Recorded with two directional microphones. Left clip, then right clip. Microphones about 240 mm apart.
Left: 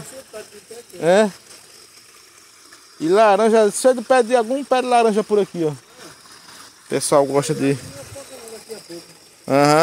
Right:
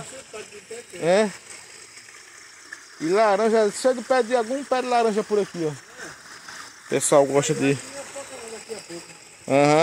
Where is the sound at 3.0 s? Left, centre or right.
Left.